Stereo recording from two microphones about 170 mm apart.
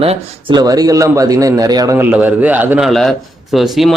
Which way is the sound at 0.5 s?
20° right (ahead or behind).